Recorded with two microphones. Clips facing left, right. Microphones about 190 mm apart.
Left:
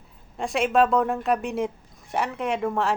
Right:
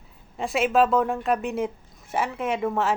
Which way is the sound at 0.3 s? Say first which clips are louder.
Even; centre (ahead or behind).